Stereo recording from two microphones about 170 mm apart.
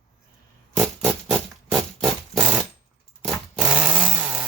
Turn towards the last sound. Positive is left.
turn(degrees=-10)  # may be behind; listen again after turning